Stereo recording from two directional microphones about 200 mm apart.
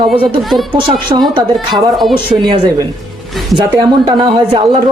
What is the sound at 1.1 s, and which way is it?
Speech, 25° right (ahead or behind).